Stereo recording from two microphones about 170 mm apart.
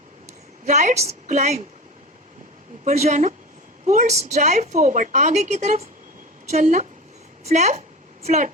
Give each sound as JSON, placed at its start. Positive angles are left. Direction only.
{"t": 0.6, "sound": "a woman's voice", "side_deg": -45}
{"t": 2.8, "sound": "a woman's voice", "side_deg": -45}